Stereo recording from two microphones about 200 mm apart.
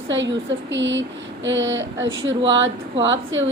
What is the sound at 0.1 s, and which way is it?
A woman's voice, 65° right (ahead or behind).